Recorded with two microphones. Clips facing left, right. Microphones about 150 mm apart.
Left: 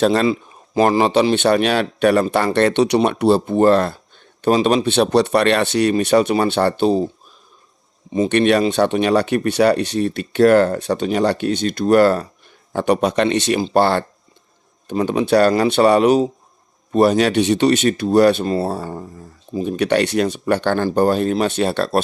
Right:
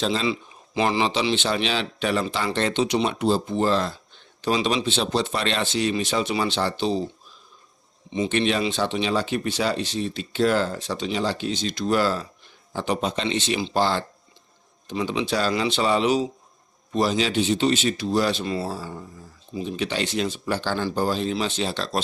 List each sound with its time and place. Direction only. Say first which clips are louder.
0.0 s speech: left 9 dB; 55° left (ahead or behind)
8.3 s speech: left 8 dB; 60° left (ahead or behind)